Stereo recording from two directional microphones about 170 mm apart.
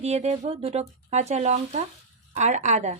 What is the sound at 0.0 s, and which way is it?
A woman's voice, 40° right (ahead or behind).